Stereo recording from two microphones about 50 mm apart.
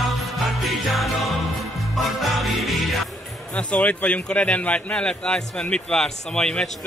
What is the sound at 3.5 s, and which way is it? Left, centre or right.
A man's voice, left.